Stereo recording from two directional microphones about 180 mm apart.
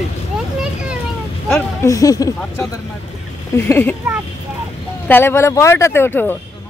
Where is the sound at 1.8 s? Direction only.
20° left (ahead or behind).